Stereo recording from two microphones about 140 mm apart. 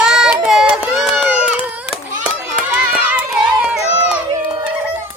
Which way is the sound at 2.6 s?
10° right (ahead or behind).